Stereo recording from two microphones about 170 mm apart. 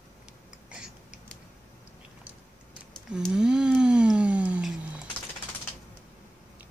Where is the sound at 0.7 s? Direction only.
5° right (ahead or behind).